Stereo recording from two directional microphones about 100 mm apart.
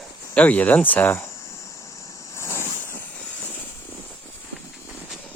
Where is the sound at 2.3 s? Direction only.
30° left (ahead or behind).